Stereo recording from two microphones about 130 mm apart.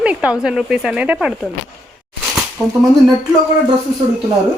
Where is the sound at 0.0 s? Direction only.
10° right (ahead or behind).